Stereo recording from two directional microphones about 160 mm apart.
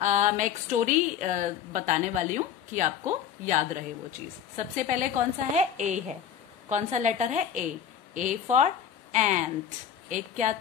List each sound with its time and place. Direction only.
0.0 s a woman's voice: 50° right (ahead or behind)